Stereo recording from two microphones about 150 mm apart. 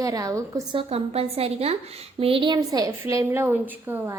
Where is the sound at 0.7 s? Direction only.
40° right (ahead or behind).